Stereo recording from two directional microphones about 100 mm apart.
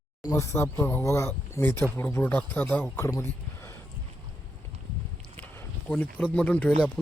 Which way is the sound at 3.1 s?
25° left (ahead or behind).